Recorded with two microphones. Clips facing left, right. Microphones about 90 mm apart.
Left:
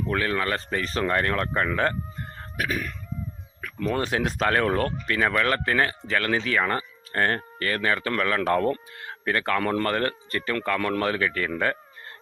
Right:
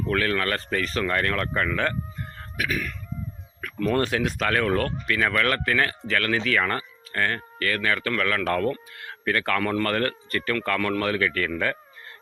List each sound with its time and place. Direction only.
0.1 s speech: 20° left (ahead or behind)
2.4 s a sound: 30° left (ahead or behind)
3.8 s speech: 15° left (ahead or behind)
4.1 s speech: 30° left (ahead or behind)